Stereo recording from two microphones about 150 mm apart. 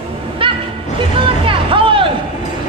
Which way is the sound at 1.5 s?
35° right (ahead or behind).